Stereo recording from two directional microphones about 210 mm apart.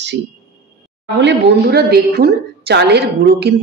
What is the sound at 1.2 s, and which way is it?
A woman's voice, 55° right (ahead or behind).